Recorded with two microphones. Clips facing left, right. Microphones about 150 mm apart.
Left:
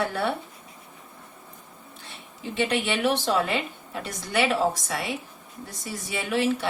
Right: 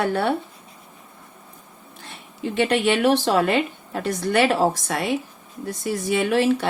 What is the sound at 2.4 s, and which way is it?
Speech, 65° right (ahead or behind).